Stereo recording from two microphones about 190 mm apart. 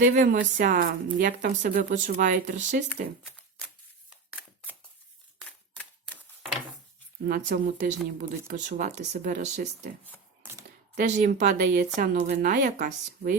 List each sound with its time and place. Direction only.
0.0 s speech: 45° right (ahead or behind)
5.5 s typewriter: 5° left (ahead or behind)
7.3 s speech: 50° right (ahead or behind)
10.9 s speech: 40° right (ahead or behind)